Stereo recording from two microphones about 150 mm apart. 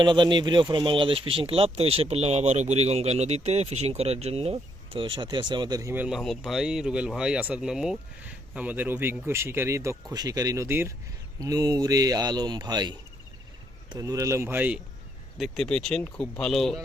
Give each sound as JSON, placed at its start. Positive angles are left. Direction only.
{"t": 0.0, "sound": "speech", "side_deg": -30}
{"t": 5.9, "sound": "speech", "side_deg": -5}
{"t": 15.4, "sound": "speech", "side_deg": 5}